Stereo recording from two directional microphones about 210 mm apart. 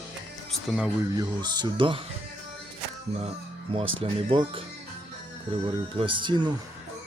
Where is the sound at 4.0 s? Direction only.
25° right (ahead or behind).